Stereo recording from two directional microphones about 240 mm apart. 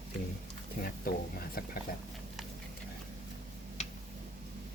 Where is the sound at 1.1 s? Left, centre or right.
Left.